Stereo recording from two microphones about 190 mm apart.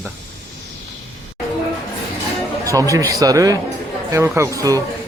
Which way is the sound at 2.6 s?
15° right (ahead or behind).